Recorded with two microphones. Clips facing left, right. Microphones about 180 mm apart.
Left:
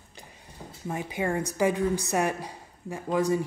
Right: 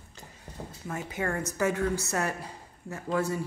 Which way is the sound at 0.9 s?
15° left (ahead or behind).